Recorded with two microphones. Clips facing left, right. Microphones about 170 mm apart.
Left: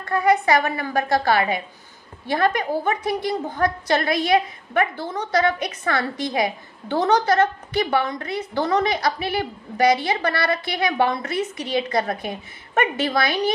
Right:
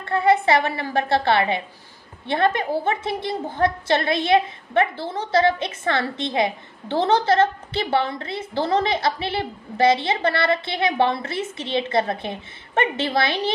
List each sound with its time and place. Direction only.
0.0 s a woman's voice: 30° right (ahead or behind)